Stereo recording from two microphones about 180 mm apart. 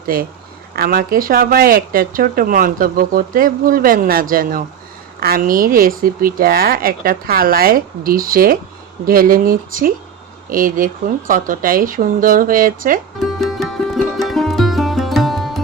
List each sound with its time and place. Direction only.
0.7 s speech: 55° right (ahead or behind)
13.2 s music: centre (ahead or behind)